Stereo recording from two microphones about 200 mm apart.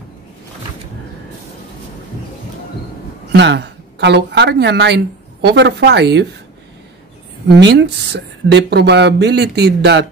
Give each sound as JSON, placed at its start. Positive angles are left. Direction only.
{"t": 3.3, "sound": "a woman's voice", "side_deg": -60}
{"t": 7.5, "sound": "speech", "side_deg": -55}